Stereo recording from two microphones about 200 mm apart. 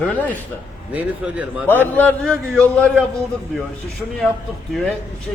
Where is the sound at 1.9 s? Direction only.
5° left (ahead or behind).